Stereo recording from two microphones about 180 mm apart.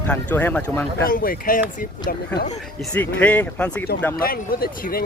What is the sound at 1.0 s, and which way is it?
Speech, 55° left (ahead or behind).